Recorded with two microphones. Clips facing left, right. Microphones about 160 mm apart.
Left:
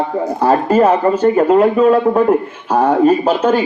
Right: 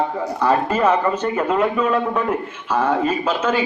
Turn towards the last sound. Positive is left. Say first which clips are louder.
# left 7 dB
turn(degrees=40)  # may be behind; listen again after turning